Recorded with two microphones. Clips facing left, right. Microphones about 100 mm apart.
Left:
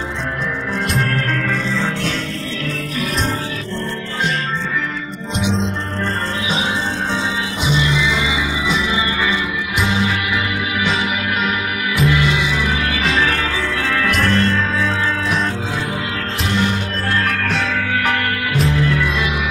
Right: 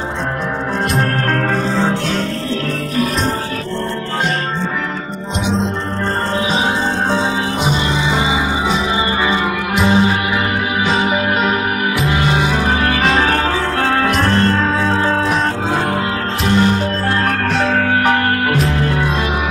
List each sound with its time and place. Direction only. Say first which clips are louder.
0.9 s music: right 3 dB; 40° right (ahead or behind)
6.5 s music: right 4 dB; 40° right (ahead or behind)
16.4 s music: right 6 dB; 40° right (ahead or behind)